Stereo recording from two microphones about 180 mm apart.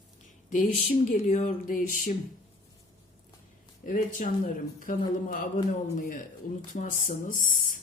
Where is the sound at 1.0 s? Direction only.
40° left (ahead or behind).